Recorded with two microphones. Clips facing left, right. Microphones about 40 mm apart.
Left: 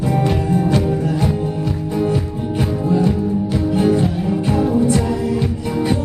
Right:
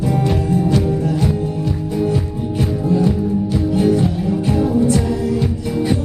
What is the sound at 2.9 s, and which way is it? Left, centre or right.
Music, centre.